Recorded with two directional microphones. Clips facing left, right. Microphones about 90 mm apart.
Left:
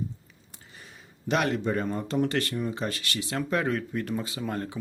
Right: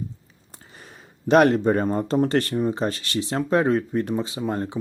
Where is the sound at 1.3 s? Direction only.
45° right (ahead or behind).